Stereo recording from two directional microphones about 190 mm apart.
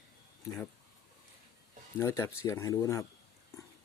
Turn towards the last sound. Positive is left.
turn(degrees=15)  # may be behind; listen again after turning